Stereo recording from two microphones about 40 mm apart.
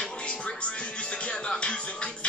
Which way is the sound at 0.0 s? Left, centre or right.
Left.